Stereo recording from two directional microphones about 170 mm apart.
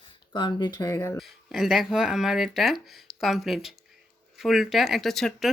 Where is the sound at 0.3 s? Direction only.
25° left (ahead or behind).